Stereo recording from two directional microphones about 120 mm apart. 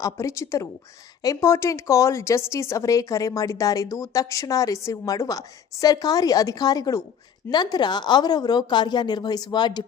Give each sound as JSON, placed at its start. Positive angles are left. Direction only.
{"t": 0.0, "sound": "a woman's voice", "side_deg": 25}